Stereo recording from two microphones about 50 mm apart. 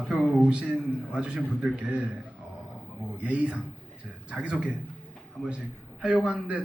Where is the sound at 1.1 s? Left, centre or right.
Centre.